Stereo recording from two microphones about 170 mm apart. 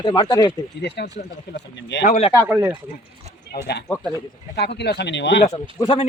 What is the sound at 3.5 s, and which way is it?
Speech, 70° left (ahead or behind).